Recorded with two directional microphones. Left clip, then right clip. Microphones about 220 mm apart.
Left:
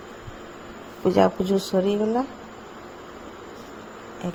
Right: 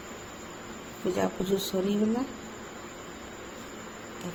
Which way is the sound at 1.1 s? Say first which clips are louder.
Left 9 dB; 30° left (ahead or behind).